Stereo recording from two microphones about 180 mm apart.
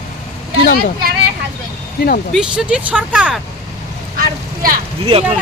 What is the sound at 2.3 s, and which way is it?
Speech, 5° right (ahead or behind).